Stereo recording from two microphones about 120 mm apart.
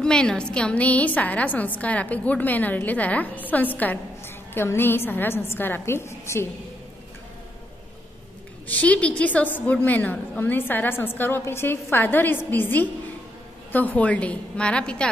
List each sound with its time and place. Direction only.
0.0 s a woman's voice: 5° left (ahead or behind); by 6.4 s 25° left (ahead or behind)
8.6 s a woman's voice: 10° left (ahead or behind)